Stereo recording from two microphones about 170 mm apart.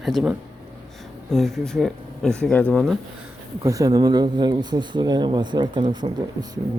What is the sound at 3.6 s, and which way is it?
Speech, 20° right (ahead or behind).